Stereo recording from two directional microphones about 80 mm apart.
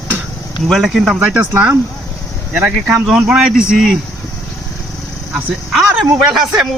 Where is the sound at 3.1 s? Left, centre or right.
Centre.